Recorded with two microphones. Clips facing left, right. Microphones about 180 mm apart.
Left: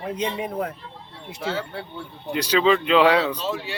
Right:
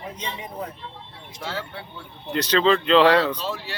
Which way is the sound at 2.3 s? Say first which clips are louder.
Even; 10° left (ahead or behind).